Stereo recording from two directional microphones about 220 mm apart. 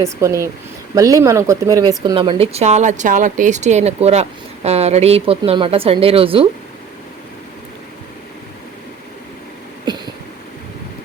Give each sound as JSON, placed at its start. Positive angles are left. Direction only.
{"t": 0.0, "sound": "speech", "side_deg": -15}